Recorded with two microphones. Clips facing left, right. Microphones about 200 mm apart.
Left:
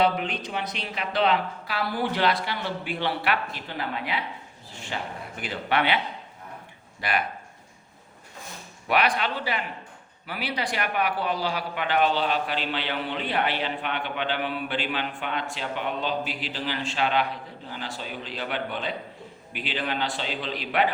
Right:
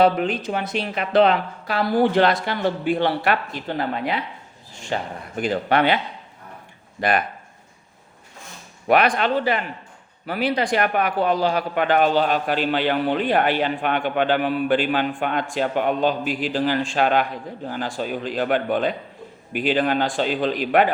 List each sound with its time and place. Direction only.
0.5 s speech: 50° right (ahead or behind)
7.0 s speech: 45° right (ahead or behind)
8.9 s speech: 50° right (ahead or behind)